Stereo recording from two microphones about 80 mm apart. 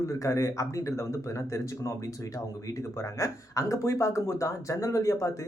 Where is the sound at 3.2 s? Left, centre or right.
Left.